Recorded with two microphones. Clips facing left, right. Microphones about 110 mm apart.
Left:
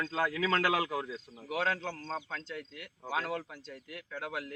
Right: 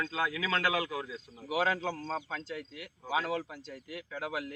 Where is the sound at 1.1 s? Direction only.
5° right (ahead or behind).